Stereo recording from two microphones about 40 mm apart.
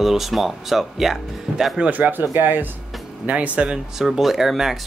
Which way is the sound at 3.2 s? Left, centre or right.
Right.